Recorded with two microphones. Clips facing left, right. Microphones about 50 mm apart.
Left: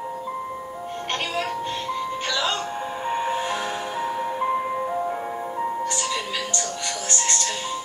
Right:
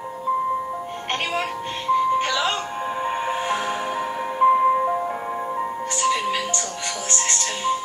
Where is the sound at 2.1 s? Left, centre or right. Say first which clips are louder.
Right 4 dB; right.